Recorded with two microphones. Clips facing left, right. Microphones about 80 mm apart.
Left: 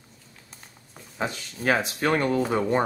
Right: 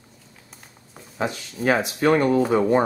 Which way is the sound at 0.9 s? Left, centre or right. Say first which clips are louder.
Right 3 dB; centre.